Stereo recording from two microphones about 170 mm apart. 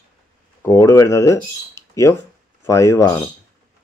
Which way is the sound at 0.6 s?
20° left (ahead or behind).